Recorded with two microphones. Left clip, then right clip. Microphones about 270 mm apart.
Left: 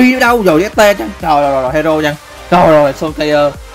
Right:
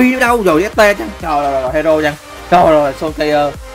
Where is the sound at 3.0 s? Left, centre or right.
Centre.